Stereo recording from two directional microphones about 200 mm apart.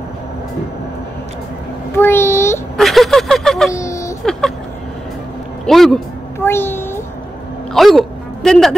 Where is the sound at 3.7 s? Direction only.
15° left (ahead or behind).